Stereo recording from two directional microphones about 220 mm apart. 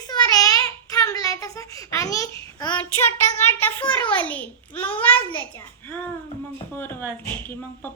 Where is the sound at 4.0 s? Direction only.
5° left (ahead or behind).